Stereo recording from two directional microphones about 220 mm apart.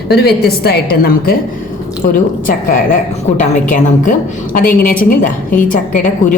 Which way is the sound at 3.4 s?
35° left (ahead or behind).